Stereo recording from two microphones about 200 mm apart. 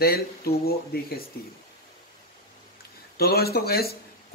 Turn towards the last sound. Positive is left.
turn(degrees=50)  # may be behind; listen again after turning